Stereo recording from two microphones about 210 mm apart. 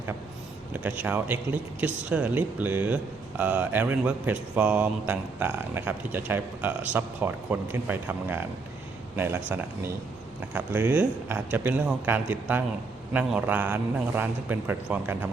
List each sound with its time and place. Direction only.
0.7 s speech: 5° right (ahead or behind)